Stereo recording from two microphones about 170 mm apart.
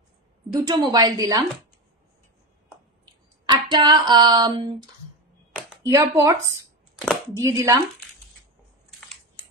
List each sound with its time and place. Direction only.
0.5 s a woman's voice: 25° right (ahead or behind)
3.4 s a sound: 25° right (ahead or behind)
4.1 s a woman's voice: 25° right (ahead or behind)
7.4 s speech: 20° right (ahead or behind)